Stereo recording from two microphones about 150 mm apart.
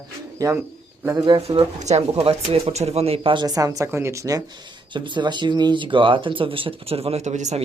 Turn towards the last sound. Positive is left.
turn(degrees=-50)  # may be behind; listen again after turning